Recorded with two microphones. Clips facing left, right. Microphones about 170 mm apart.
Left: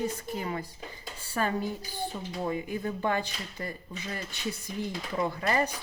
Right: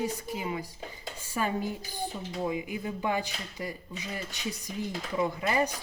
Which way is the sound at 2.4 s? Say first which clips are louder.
Left 1 dB; 15° right (ahead or behind).